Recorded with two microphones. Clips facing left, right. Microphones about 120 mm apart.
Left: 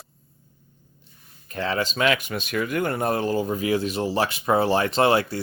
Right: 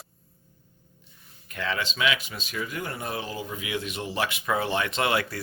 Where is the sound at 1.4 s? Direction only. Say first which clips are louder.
Left 5 dB; 35° left (ahead or behind).